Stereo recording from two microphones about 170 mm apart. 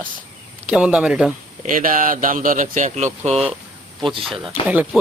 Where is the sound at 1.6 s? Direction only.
55° right (ahead or behind).